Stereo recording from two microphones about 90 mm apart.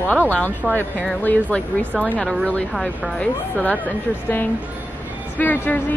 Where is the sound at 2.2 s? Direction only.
5° left (ahead or behind).